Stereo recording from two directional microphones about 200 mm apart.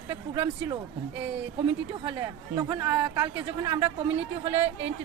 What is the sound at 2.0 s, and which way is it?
Speech, 20° right (ahead or behind).